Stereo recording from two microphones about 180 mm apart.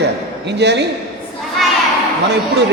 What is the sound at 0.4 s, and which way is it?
Speech, 70° right (ahead or behind).